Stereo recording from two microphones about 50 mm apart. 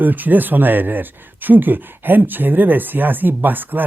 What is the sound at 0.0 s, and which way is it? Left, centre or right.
Speech, right.